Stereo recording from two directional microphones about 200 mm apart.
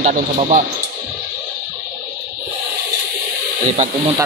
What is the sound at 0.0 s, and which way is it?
Speech, 35° right (ahead or behind).